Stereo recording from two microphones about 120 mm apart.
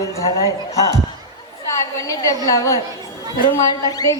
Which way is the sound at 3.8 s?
30° left (ahead or behind).